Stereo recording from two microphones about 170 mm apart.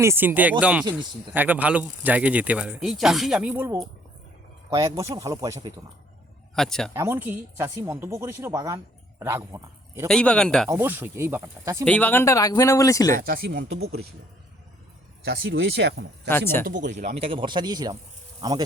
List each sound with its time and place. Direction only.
0.0 s speech: 15° right (ahead or behind)
6.6 s a man's voice: 5° left (ahead or behind)
6.9 s speech: 15° right (ahead or behind)
10.1 s a man's voice: 5° left (ahead or behind)
10.7 s speech: 15° right (ahead or behind)
11.9 s speech: 10° left (ahead or behind)
13.2 s speech: 75° right (ahead or behind)
15.2 s speech: 70° right (ahead or behind)
16.6 s speech: 50° right (ahead or behind)
17.2 s speech: 30° right (ahead or behind)